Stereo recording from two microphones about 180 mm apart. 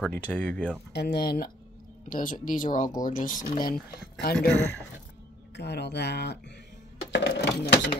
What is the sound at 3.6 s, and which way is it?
Speech, 55° left (ahead or behind).